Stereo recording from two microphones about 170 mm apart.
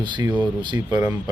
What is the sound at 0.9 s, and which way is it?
Speech, 15° right (ahead or behind).